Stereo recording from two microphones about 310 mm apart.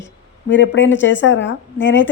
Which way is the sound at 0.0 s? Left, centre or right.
Left.